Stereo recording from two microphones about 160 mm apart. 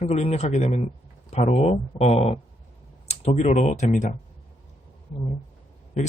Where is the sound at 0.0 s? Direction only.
40° left (ahead or behind).